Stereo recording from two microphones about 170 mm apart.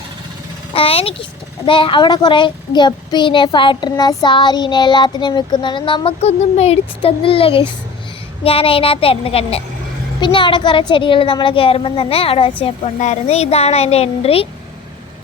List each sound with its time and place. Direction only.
0.7 s speech: 35° left (ahead or behind)